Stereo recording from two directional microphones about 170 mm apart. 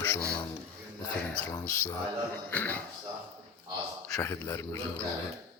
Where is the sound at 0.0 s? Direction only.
10° left (ahead or behind).